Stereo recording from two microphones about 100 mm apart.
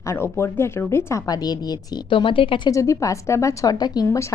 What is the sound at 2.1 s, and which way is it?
Speech, 60° left (ahead or behind).